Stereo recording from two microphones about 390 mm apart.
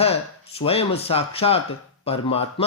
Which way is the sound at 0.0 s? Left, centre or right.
Centre.